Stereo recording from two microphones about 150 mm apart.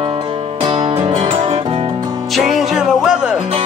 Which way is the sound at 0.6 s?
40° right (ahead or behind).